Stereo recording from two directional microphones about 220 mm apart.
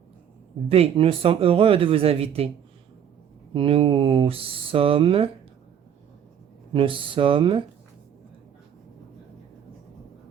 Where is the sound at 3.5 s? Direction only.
25° right (ahead or behind).